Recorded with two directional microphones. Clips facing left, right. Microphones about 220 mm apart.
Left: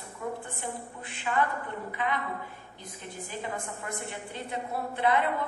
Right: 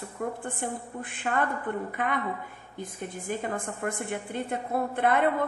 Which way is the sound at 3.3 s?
50° right (ahead or behind).